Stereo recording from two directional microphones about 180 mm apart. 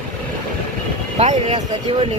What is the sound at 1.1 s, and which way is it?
Speech, 35° right (ahead or behind).